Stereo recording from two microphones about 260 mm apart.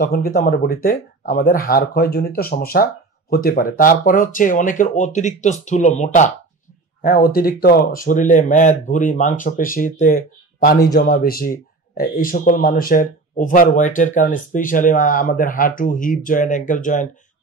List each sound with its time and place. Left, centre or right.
0.0 s speech: left